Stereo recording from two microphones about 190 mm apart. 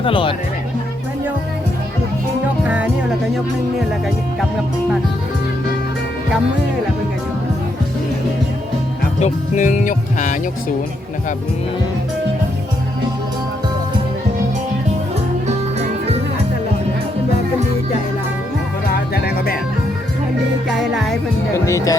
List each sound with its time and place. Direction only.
0.0 s speech: 25° left (ahead or behind)
2.6 s music: 5° right (ahead or behind)
9.2 s music: 40° left (ahead or behind)
19.1 s music: 55° left (ahead or behind)
20.7 s music: centre (ahead or behind)
21.5 s speech: 15° left (ahead or behind)